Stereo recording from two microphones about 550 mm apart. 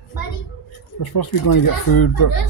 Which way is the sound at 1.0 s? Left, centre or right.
Left.